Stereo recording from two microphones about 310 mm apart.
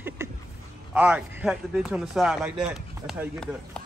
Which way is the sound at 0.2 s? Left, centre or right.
Centre.